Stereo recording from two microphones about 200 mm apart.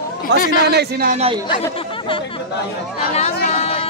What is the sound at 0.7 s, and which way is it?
Speech, 50° right (ahead or behind).